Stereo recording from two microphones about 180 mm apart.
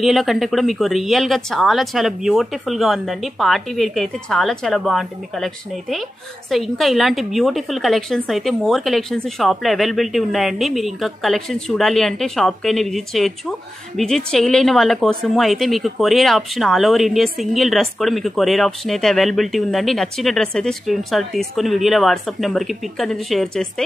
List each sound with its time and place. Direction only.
0.0 s a woman's voice: centre (ahead or behind)